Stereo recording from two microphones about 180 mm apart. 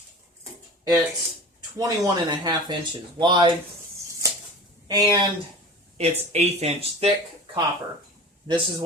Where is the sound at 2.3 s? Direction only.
20° right (ahead or behind).